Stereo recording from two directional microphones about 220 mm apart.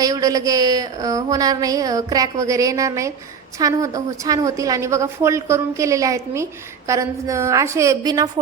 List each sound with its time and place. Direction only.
0.0 s a woman's voice: 15° right (ahead or behind)